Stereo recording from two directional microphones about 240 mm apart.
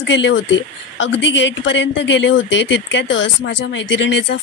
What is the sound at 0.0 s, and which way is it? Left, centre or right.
A woman's voice, left.